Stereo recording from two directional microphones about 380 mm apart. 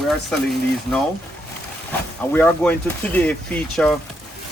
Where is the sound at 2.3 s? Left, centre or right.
Centre.